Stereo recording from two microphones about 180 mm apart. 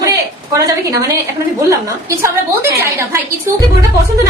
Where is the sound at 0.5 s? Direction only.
20° right (ahead or behind).